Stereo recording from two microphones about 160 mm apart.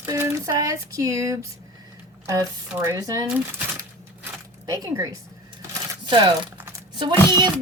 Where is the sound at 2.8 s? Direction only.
20° right (ahead or behind).